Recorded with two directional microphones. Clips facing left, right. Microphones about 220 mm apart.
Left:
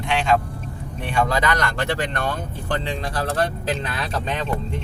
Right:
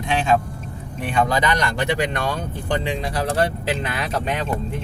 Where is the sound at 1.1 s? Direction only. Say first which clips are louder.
Right 1 dB; 20° right (ahead or behind).